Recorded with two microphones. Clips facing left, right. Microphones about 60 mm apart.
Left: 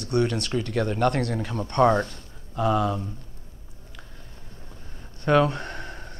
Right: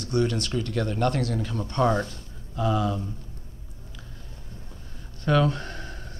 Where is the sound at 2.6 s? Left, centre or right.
Centre.